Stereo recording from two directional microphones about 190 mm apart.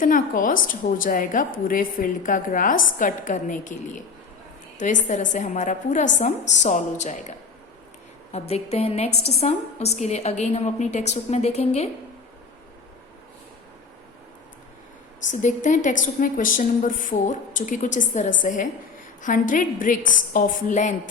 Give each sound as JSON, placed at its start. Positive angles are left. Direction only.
{"t": 0.0, "sound": "a woman's voice", "side_deg": 45}
{"t": 5.0, "sound": "a woman's voice", "side_deg": 40}
{"t": 15.3, "sound": "a woman's voice", "side_deg": 40}